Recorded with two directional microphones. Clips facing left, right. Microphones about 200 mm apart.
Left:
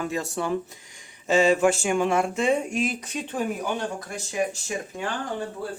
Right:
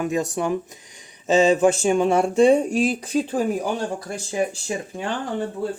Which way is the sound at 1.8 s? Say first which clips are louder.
Right 4 dB; 30° right (ahead or behind).